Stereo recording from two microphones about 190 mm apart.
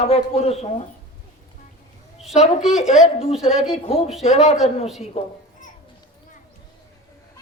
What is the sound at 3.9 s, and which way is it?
A man's voice, 30° left (ahead or behind).